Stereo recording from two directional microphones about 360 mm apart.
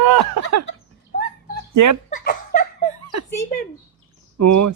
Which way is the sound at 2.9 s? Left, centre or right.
Right.